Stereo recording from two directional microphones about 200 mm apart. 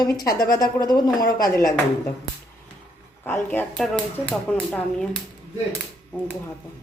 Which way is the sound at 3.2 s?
10° left (ahead or behind).